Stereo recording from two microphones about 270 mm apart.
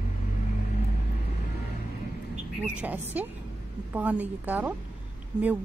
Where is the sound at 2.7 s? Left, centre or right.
Centre.